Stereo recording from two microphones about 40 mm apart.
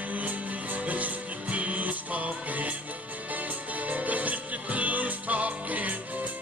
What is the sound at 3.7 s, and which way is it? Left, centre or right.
Music, right.